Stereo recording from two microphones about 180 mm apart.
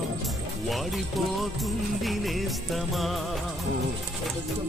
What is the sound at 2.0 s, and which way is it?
Music, centre (ahead or behind).